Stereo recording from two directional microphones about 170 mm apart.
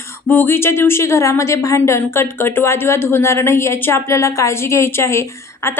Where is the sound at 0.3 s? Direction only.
10° left (ahead or behind).